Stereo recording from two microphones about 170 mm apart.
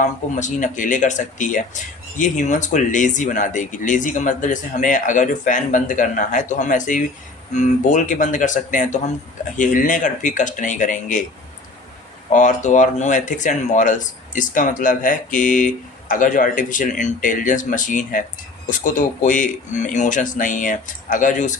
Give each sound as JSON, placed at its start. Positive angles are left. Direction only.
{"t": 0.0, "sound": "speech", "side_deg": 45}
{"t": 12.3, "sound": "speech", "side_deg": 45}